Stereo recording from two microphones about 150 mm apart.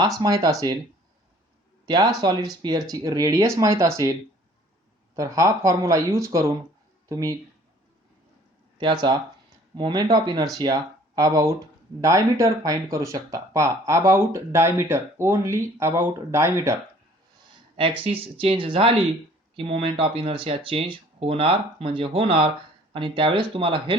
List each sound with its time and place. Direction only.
0.0 s speech: 25° right (ahead or behind)
1.9 s speech: 25° right (ahead or behind)
8.8 s speech: 30° right (ahead or behind)
17.7 s speech: 35° right (ahead or behind)